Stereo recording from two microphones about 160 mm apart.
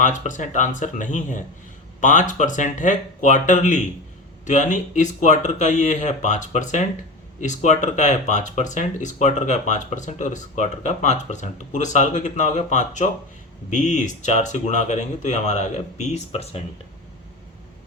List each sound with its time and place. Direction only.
0.0 s speech: 50° left (ahead or behind)